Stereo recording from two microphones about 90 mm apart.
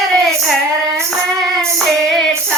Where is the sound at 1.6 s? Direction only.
5° left (ahead or behind).